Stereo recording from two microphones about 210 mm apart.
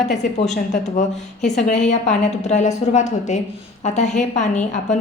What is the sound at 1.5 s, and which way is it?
A woman's voice, 35° left (ahead or behind).